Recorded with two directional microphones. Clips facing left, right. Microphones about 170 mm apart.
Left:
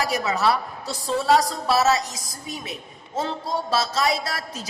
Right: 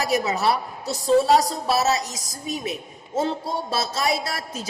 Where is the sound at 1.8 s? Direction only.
25° right (ahead or behind).